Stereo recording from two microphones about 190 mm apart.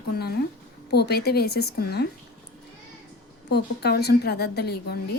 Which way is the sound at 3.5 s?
60° left (ahead or behind).